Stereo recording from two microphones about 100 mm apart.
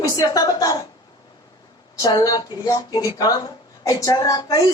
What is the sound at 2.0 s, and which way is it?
Speech, 40° left (ahead or behind).